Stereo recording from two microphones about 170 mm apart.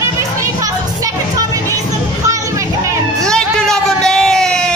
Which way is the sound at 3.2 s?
5° left (ahead or behind).